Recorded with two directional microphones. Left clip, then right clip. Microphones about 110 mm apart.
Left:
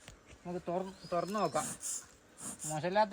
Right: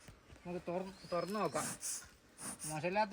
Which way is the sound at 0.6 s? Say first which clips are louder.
Left 5 dB; 5° left (ahead or behind).